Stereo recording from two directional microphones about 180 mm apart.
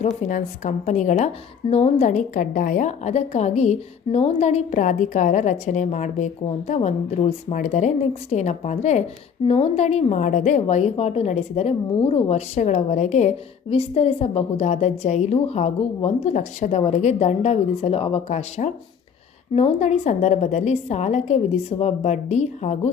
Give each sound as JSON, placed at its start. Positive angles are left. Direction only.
{"t": 0.0, "sound": "a woman's voice", "side_deg": 40}